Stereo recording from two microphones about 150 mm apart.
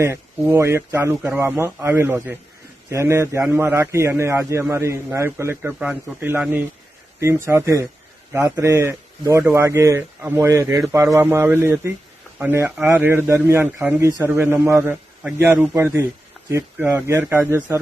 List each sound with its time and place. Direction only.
0.0 s a man's voice: 20° right (ahead or behind)